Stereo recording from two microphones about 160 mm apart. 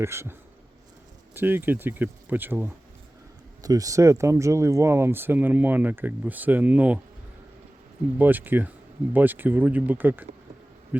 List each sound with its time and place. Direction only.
0.0 s speech: 15° right (ahead or behind)
8.2 s speech: 10° right (ahead or behind)